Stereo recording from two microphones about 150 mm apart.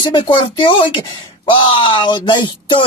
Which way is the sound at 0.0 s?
35° left (ahead or behind).